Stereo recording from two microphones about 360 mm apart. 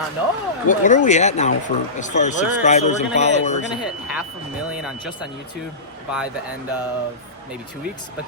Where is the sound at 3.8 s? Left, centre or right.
Centre.